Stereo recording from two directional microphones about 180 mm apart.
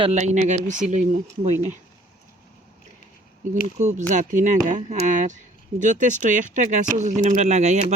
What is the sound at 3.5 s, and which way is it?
Speech, 40° right (ahead or behind).